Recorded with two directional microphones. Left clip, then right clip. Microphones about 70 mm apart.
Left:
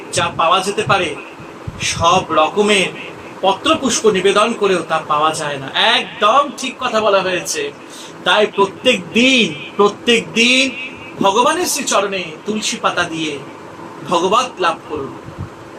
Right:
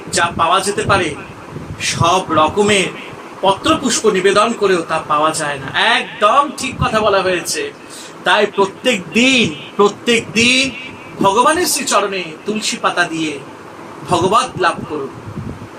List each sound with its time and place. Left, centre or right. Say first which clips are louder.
0.1 s a man's voice: right 1 dB; right
6.1 s a man's voice: right 1 dB; centre
8.2 s a man's voice: even; right
14.1 s a man's voice: right 1 dB; right